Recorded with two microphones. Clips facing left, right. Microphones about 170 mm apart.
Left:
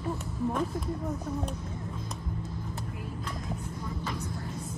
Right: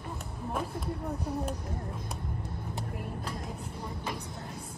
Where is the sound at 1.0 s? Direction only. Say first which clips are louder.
Left 1 dB; 65° right (ahead or behind).